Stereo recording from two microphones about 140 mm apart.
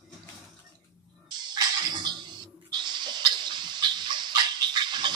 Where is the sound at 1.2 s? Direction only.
30° right (ahead or behind).